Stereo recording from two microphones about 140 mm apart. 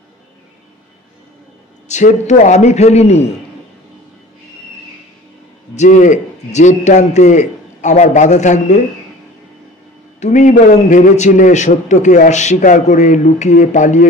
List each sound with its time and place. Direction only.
1.9 s a man's voice: 60° left (ahead or behind)
5.8 s a man's voice: 60° left (ahead or behind)
10.2 s a man's voice: 60° left (ahead or behind)